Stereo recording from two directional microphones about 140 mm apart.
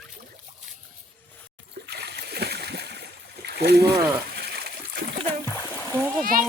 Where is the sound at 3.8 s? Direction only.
20° right (ahead or behind).